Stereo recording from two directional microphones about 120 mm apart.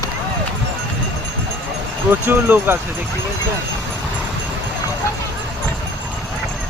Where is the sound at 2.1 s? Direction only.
20° right (ahead or behind).